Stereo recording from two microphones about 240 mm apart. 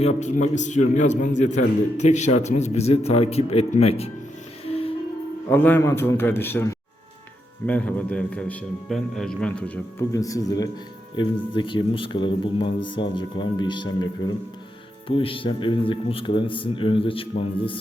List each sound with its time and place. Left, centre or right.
0.0 s a man's voice: left
4.6 s music: left
5.5 s a man's voice: centre